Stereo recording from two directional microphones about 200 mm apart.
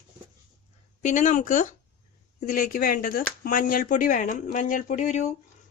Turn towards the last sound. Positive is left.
turn(degrees=35)  # may be behind; listen again after turning